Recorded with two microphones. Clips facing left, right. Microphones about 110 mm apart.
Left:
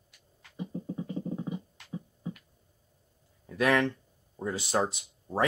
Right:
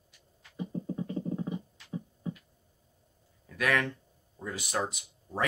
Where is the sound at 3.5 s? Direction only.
25° left (ahead or behind).